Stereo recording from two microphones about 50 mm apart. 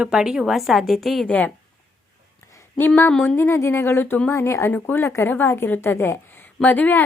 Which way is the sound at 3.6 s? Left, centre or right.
Left.